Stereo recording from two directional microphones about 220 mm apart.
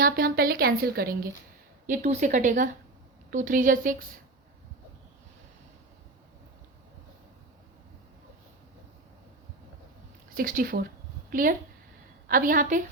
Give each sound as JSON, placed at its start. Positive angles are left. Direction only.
{"t": 0.0, "sound": "a woman's voice", "side_deg": -40}
{"t": 1.9, "sound": "speech", "side_deg": -30}
{"t": 10.3, "sound": "a woman's voice", "side_deg": -40}